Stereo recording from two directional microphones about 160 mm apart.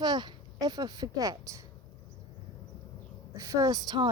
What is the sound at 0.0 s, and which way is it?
Speech, 25° right (ahead or behind).